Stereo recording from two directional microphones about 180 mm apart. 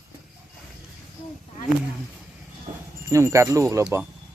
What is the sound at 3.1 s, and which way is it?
Speech, 15° right (ahead or behind).